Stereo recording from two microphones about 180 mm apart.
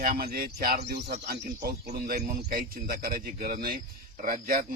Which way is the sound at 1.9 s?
45° right (ahead or behind).